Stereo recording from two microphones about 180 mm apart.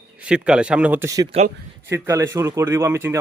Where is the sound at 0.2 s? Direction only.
5° right (ahead or behind).